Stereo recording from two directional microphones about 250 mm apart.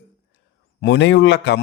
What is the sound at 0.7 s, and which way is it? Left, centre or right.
Speech, left.